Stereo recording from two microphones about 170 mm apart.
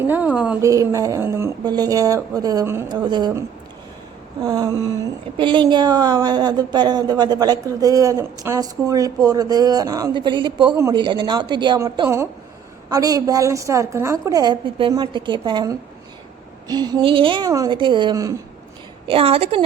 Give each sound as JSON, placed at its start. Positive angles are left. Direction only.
{"t": 0.1, "sound": "a woman's voice", "side_deg": -10}
{"t": 0.7, "sound": "a woman's voice", "side_deg": -20}
{"t": 4.4, "sound": "a woman's voice", "side_deg": -20}
{"t": 10.8, "sound": "a woman's voice", "side_deg": -15}
{"t": 19.0, "sound": "a woman's voice", "side_deg": -35}